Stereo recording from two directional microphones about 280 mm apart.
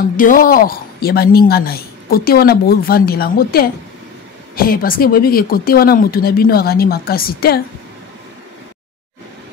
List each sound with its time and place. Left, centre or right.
0.2 s a woman's voice: left